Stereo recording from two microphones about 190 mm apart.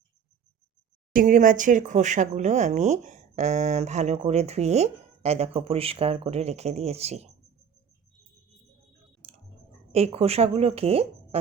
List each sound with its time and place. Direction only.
1.1 s speech: 45° right (ahead or behind)
9.9 s speech: 30° right (ahead or behind)